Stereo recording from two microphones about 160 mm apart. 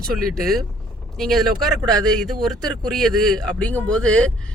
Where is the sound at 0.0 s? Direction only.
Centre (ahead or behind).